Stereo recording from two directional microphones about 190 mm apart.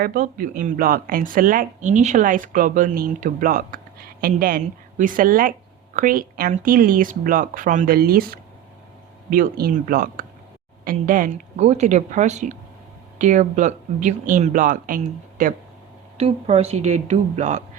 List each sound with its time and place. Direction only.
0.0 s a woman's voice: 50° right (ahead or behind)
16.1 s speech: 30° right (ahead or behind)